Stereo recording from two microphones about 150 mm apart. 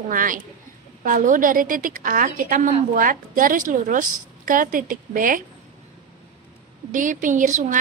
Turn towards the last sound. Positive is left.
turn(degrees=-55)  # may be behind; listen again after turning